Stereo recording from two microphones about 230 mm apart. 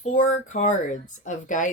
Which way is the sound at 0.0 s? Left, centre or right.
Left.